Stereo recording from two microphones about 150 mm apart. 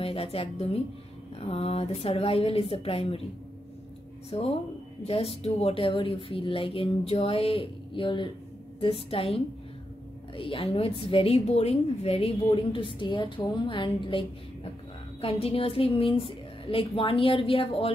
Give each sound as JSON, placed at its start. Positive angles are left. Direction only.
{"t": 0.0, "sound": "a woman's voice", "side_deg": 40}
{"t": 4.3, "sound": "a woman's voice", "side_deg": 40}